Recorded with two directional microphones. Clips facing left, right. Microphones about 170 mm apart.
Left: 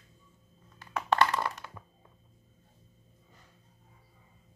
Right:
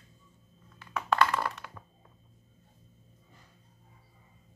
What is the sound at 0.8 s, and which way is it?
Crushing, 35° left (ahead or behind).